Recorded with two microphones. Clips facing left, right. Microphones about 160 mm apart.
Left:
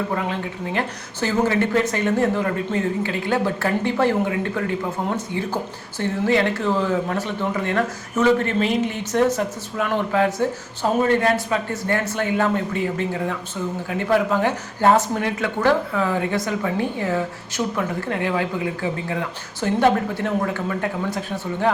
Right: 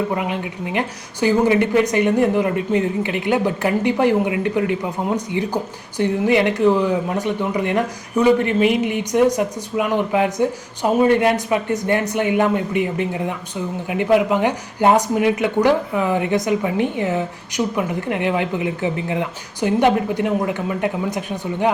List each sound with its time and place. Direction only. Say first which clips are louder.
0.1 s a woman's voice: right 2 dB; 15° right (ahead or behind)